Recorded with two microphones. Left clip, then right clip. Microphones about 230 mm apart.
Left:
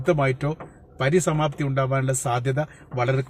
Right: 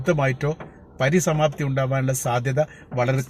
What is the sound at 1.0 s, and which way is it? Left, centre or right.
A man's voice, centre.